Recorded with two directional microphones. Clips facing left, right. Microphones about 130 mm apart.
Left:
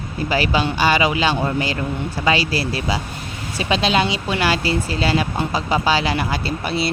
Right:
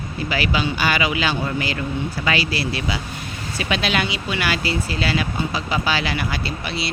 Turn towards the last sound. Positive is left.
turn(degrees=40)  # may be behind; listen again after turning